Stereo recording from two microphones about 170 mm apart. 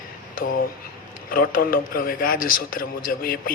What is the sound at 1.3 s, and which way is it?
A man's voice, 60° left (ahead or behind).